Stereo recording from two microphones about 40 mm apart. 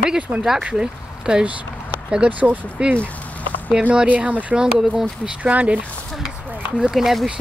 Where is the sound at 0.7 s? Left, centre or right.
Right.